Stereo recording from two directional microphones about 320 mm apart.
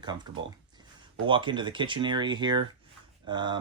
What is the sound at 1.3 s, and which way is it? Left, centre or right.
Speech, centre.